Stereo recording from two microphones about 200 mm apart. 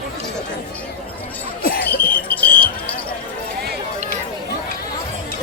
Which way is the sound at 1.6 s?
50° left (ahead or behind).